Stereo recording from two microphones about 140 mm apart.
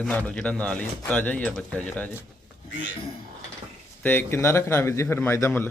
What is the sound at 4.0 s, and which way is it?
Speech, 15° left (ahead or behind).